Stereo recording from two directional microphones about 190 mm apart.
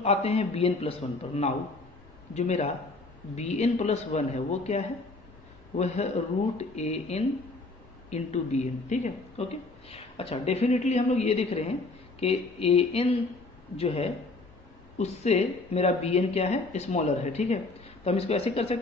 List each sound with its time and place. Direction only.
0.0 s speech: 35° left (ahead or behind)
6.6 s speech: 35° left (ahead or behind)